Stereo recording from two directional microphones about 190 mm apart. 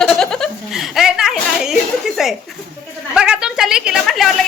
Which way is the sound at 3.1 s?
5° right (ahead or behind).